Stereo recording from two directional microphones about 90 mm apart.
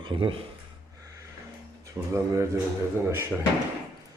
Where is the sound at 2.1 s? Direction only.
35° right (ahead or behind).